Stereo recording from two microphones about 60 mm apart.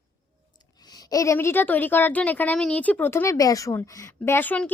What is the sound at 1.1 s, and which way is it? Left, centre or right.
Speech, left.